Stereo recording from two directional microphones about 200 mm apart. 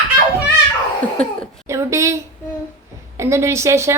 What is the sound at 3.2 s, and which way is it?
Speech, 15° right (ahead or behind).